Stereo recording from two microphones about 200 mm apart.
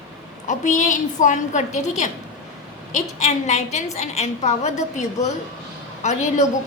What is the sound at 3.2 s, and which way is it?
Speech, 35° left (ahead or behind).